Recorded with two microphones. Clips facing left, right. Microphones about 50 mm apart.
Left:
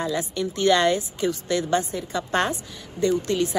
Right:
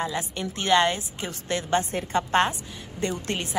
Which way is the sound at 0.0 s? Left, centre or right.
Right.